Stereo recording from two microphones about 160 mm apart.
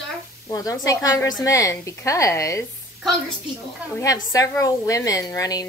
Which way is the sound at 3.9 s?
20° left (ahead or behind).